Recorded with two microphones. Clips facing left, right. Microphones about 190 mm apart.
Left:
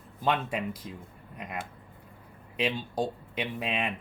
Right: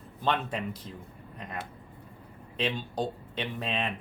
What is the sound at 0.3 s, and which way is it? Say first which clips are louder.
Speech: left 1 dB; 10° left (ahead or behind).